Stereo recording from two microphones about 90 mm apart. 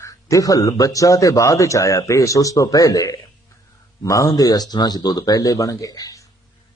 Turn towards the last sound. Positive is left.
turn(degrees=40)  # may be behind; listen again after turning